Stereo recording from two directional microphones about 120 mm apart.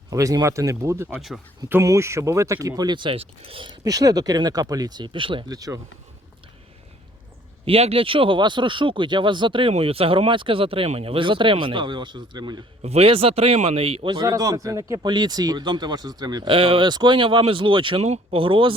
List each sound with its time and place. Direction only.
0.1 s speech: 30° right (ahead or behind); by 3.8 s 45° right (ahead or behind)
3.8 s speech: 30° right (ahead or behind)
5.5 s speech: 30° right (ahead or behind)
7.6 s speech: 55° right (ahead or behind); by 12.6 s 35° right (ahead or behind)
12.8 s speech: 60° right (ahead or behind)
14.1 s speech: 30° right (ahead or behind)
18.0 s speech: 60° right (ahead or behind)